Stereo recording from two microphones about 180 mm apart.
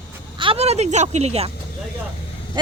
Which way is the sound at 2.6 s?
25° right (ahead or behind).